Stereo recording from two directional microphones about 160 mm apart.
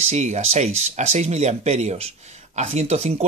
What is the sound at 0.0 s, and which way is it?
Speech, 45° right (ahead or behind).